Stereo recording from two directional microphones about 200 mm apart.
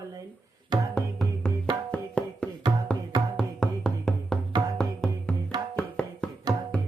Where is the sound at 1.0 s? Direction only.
5° left (ahead or behind).